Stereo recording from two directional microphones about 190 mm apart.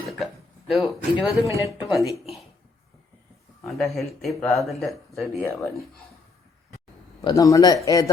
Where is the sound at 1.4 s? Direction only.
15° right (ahead or behind).